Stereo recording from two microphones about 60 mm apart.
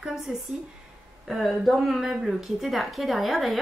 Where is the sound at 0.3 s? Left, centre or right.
Right.